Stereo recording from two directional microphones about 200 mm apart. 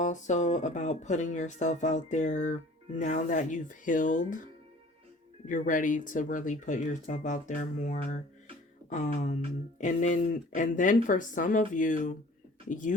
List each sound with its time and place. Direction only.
0.0 s speech: 35° left (ahead or behind)
5.5 s speech: 40° left (ahead or behind)